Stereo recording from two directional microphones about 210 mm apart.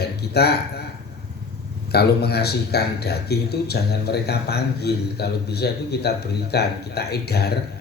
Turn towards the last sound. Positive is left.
turn(degrees=50)  # may be behind; listen again after turning